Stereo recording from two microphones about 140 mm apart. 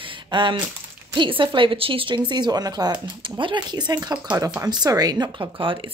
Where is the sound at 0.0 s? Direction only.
35° right (ahead or behind).